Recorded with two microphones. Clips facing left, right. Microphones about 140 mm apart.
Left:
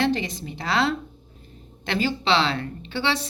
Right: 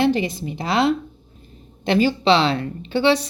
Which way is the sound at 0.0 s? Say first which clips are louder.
Right 5 dB; 15° right (ahead or behind).